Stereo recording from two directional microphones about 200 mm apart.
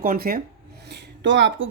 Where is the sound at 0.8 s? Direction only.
60° right (ahead or behind).